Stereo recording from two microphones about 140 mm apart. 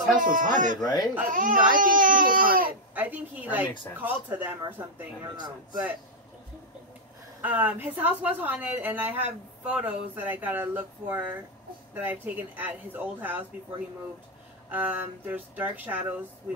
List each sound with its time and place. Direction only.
0.2 s speech: 75° right (ahead or behind)
0.8 s speech: 30° left (ahead or behind)
1.3 s speech: 75° right (ahead or behind); by 2.7 s 90° right
2.9 s a woman's voice: 10° right (ahead or behind)
5.3 s a man's voice: 30° right (ahead or behind)
7.4 s a woman's voice: 10° right (ahead or behind)
14.7 s a woman's voice: 10° right (ahead or behind)